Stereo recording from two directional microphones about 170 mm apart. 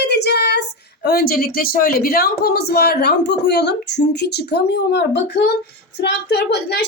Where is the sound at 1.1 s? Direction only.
60° left (ahead or behind).